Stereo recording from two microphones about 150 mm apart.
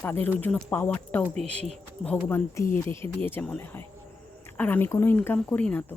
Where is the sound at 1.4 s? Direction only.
45° right (ahead or behind).